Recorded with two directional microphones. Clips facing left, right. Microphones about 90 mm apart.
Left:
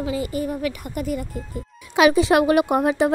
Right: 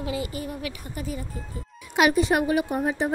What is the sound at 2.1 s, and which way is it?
A woman's voice, 90° left.